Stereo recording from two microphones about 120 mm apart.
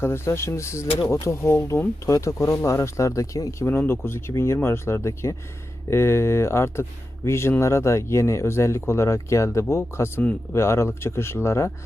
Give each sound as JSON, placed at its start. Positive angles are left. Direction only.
{"t": 0.0, "sound": "speech", "side_deg": 20}